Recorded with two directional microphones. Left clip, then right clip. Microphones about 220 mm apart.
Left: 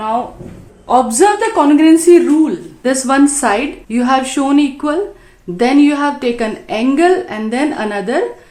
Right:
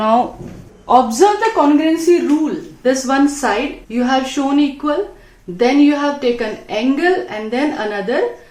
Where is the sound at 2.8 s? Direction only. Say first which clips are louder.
Left 2 dB; 45° left (ahead or behind).